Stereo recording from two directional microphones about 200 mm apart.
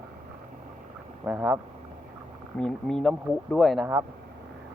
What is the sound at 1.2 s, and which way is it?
Speech, 5° right (ahead or behind).